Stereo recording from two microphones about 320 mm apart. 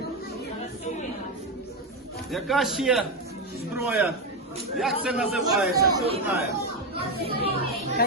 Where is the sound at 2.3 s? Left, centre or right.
Centre.